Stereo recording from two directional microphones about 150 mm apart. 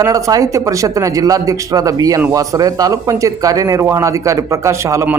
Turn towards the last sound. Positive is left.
turn(degrees=-15)  # may be behind; listen again after turning